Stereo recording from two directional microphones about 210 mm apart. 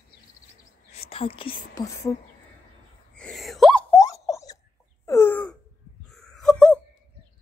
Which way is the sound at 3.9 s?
15° left (ahead or behind).